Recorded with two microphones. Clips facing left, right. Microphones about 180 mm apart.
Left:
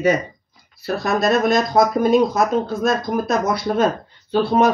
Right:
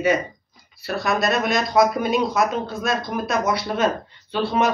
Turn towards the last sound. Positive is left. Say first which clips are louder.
# left 5 dB
turn(degrees=50)  # may be behind; listen again after turning